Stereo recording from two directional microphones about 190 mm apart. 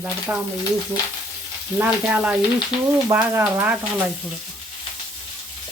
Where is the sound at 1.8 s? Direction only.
10° right (ahead or behind).